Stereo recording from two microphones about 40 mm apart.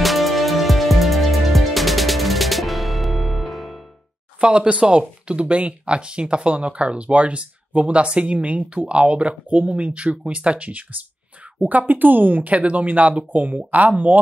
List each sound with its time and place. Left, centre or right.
0.0 s music: centre
4.4 s speech: right